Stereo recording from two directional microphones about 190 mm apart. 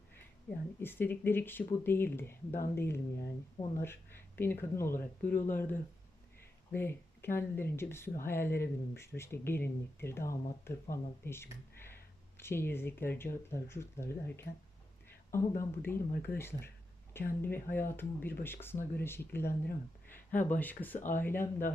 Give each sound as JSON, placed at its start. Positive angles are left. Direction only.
{"t": 0.8, "sound": "speech", "side_deg": 10}